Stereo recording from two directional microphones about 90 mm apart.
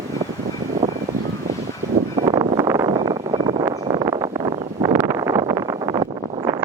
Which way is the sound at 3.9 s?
45° right (ahead or behind).